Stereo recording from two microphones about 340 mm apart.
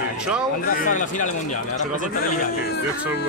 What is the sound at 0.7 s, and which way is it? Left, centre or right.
Speech, left.